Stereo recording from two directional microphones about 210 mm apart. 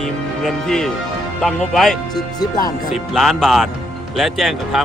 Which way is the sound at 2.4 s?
20° left (ahead or behind).